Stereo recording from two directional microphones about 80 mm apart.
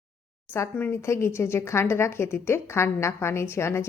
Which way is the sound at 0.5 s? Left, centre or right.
Left.